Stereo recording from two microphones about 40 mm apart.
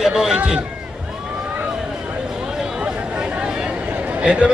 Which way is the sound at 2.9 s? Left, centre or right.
Right.